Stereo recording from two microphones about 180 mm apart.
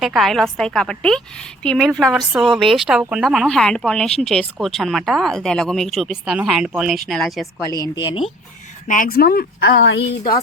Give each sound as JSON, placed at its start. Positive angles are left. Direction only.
{"t": 0.0, "sound": "speech", "side_deg": 0}
{"t": 7.7, "sound": "a woman's voice", "side_deg": 20}
{"t": 8.9, "sound": "speech", "side_deg": 50}